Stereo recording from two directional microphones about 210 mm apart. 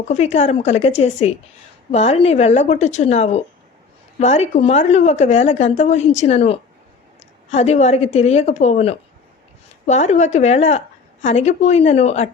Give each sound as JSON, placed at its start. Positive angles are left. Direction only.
{"t": 0.1, "sound": "a woman's voice", "side_deg": 30}